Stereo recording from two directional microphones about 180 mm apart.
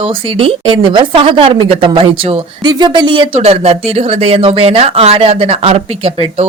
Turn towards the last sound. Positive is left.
turn(degrees=-35)  # may be behind; listen again after turning